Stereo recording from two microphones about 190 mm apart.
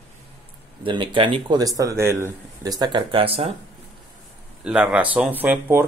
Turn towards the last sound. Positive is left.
turn(degrees=-10)  # may be behind; listen again after turning